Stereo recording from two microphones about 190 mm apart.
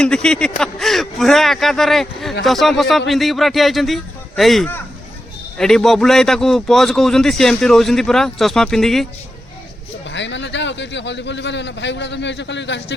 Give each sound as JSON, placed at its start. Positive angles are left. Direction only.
{"t": 0.0, "sound": "speech", "side_deg": 5}
{"t": 10.1, "sound": "a man's voice", "side_deg": 70}